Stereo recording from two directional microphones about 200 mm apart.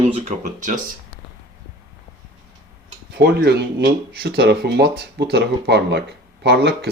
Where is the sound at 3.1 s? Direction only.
55° right (ahead or behind).